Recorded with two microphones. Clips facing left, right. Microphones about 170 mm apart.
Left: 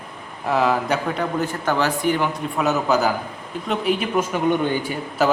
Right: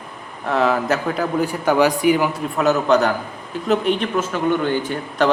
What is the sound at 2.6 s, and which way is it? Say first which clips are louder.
A man's voice: right 3 dB; centre (ahead or behind).